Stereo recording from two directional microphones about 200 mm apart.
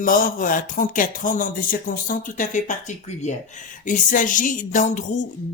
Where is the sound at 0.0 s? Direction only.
45° left (ahead or behind).